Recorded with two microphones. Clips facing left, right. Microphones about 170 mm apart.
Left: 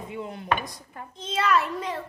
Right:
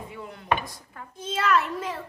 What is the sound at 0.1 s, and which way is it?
Chopping, 20° left (ahead or behind).